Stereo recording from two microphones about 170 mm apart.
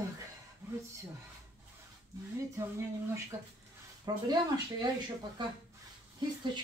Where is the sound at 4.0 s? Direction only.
25° right (ahead or behind).